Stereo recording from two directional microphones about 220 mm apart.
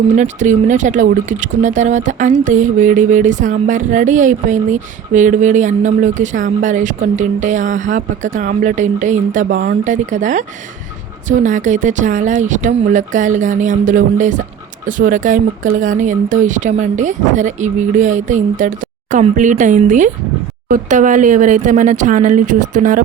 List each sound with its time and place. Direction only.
0.2 s music: 35° right (ahead or behind)